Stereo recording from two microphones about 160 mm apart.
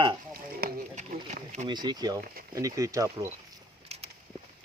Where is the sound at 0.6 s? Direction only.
70° right (ahead or behind).